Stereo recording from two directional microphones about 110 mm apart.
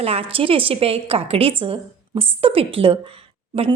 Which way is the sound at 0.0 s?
60° right (ahead or behind).